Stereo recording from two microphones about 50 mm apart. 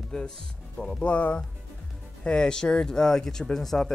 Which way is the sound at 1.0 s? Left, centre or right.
Left.